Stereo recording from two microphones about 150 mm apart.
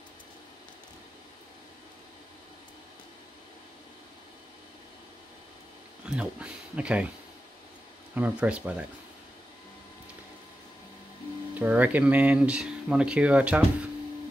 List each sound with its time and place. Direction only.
6.0 s speech: 5° right (ahead or behind)
8.1 s speech: 10° right (ahead or behind)
11.5 s speech: 10° right (ahead or behind)